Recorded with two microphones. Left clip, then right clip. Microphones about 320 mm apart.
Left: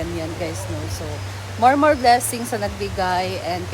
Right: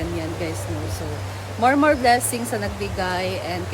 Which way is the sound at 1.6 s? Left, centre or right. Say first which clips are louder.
Left 2 dB; centre.